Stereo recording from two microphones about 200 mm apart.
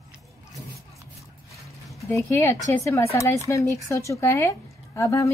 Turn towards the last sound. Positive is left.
turn(degrees=15)  # may be behind; listen again after turning